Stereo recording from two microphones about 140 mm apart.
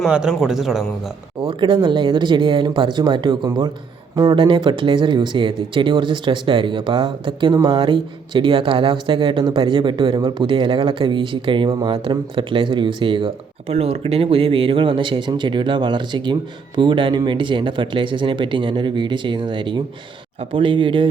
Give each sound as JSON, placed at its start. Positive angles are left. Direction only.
{"t": 0.0, "sound": "speech", "side_deg": -5}
{"t": 1.4, "sound": "speech", "side_deg": -35}